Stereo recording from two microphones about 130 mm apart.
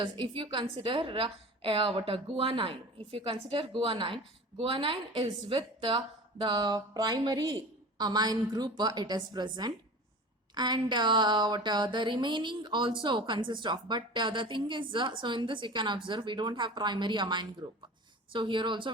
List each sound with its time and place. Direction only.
0.0 s a woman's voice: 40° right (ahead or behind)